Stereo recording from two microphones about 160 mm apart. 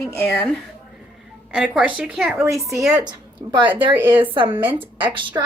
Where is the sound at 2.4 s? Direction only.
20° right (ahead or behind).